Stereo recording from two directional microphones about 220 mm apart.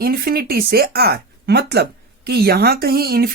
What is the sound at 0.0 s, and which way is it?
Speech, 45° right (ahead or behind).